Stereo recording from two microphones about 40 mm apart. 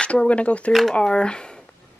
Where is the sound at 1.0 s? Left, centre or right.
Left.